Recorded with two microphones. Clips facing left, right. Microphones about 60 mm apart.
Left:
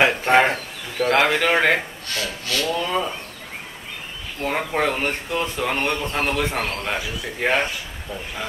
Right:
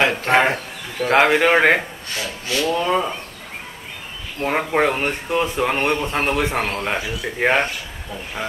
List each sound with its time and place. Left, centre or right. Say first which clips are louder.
0.0 s speech: even; centre
4.4 s speech: right 4 dB; centre